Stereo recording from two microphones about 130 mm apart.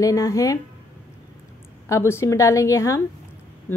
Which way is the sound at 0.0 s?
25° left (ahead or behind).